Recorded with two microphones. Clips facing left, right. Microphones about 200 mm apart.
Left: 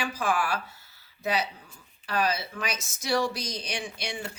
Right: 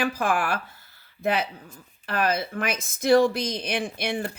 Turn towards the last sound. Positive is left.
turn(degrees=-55)  # may be behind; listen again after turning